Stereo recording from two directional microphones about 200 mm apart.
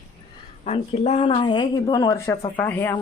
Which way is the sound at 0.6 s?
30° left (ahead or behind).